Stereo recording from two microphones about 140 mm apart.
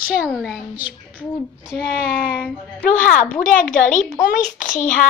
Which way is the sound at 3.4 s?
70° left (ahead or behind).